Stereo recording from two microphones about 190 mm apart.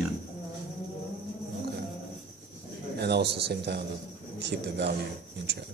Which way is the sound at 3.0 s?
60° right (ahead or behind).